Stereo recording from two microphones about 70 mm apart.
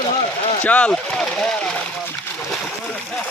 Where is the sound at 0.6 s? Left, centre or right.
Centre.